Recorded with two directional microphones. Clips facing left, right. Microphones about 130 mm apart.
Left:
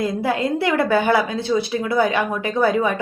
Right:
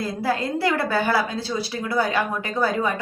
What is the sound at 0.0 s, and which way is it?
A woman's voice, 20° left (ahead or behind).